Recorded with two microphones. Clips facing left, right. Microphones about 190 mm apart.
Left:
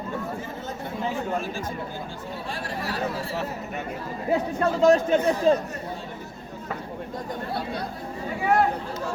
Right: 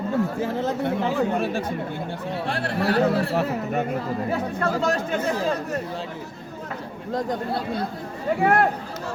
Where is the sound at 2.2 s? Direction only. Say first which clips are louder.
Right 8 dB; 70° right (ahead or behind).